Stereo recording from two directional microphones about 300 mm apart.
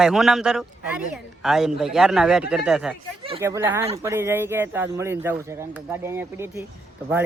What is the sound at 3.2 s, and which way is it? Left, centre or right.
Speech, centre.